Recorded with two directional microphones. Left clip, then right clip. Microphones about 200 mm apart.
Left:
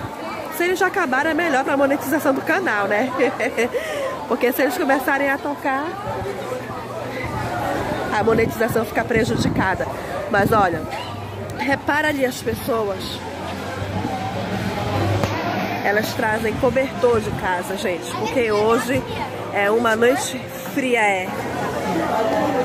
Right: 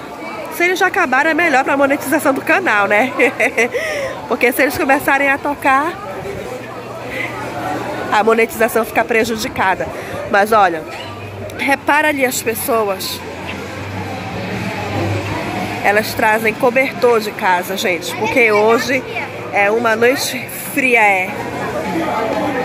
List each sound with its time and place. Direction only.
0.6 s speech: 5° left (ahead or behind)
8.1 s speech: centre (ahead or behind)
15.8 s speech: 5° right (ahead or behind)
19.5 s speech: 10° left (ahead or behind)